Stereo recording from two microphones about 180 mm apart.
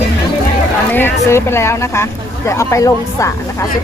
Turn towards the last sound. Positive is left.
turn(degrees=15)  # may be behind; listen again after turning